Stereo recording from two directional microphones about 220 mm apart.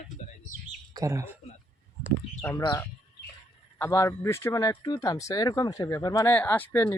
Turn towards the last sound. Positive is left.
turn(degrees=10)  # may be behind; listen again after turning